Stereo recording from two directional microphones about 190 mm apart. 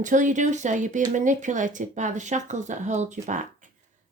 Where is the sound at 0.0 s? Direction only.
40° right (ahead or behind).